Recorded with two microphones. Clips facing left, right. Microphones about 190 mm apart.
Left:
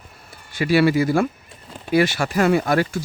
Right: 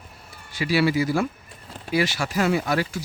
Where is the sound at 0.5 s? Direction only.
55° left (ahead or behind).